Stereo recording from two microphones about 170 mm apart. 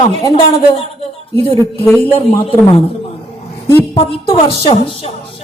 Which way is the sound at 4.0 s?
30° left (ahead or behind).